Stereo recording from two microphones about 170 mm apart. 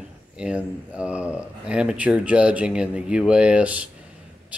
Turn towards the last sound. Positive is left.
turn(degrees=-10)  # may be behind; listen again after turning